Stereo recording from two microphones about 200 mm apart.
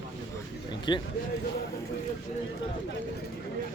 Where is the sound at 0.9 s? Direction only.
20° left (ahead or behind).